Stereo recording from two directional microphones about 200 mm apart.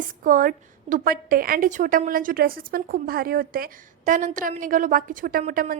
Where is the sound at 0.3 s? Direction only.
40° right (ahead or behind).